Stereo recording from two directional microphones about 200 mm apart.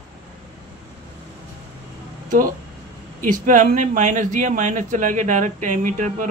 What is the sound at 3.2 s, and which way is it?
Speech, 40° right (ahead or behind).